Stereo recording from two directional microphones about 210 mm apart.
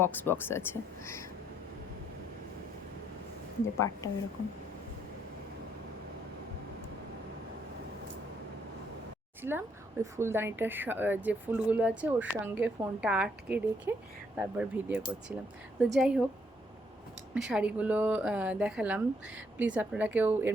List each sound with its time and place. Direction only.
0.0 s speech: 10° left (ahead or behind)
3.8 s speech: 15° left (ahead or behind)
9.4 s a woman's voice: 10° right (ahead or behind)
17.3 s a woman's voice: 5° right (ahead or behind)